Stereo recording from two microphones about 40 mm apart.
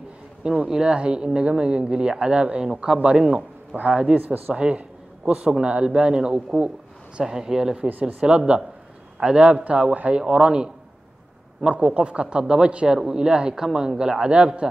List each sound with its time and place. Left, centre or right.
0.4 s a man's voice: right
4.2 s speech: right
4.7 s a man's voice: right
11.9 s a man's voice: right